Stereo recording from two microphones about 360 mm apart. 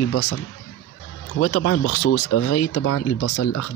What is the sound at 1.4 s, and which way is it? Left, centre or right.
Speech, left.